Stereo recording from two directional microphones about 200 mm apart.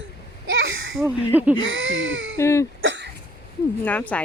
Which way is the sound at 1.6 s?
70° right (ahead or behind).